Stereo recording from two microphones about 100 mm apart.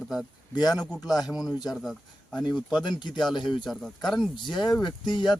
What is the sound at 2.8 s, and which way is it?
Speech, 50° left (ahead or behind).